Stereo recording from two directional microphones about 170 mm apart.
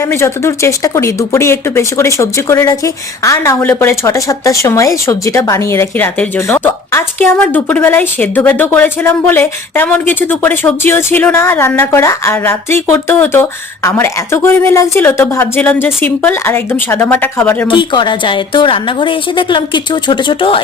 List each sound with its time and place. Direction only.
0.0 s speech: 15° left (ahead or behind)
17.7 s a woman's voice: 30° left (ahead or behind)